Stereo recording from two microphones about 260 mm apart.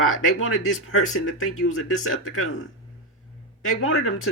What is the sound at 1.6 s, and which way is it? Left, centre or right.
Speech, left.